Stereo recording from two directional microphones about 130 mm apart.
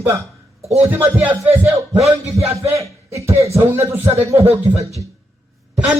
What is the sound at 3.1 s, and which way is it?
Speech, 20° right (ahead or behind).